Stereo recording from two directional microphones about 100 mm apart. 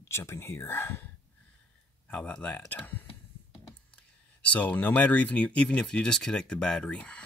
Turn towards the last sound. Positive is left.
turn(degrees=10)  # may be behind; listen again after turning